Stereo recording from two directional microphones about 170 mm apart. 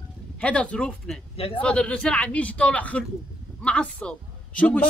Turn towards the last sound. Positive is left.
turn(degrees=10)  # may be behind; listen again after turning